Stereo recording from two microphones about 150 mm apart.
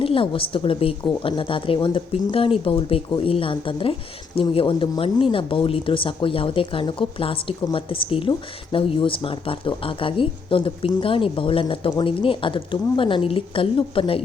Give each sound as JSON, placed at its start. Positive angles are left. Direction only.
{"t": 0.0, "sound": "speech", "side_deg": 35}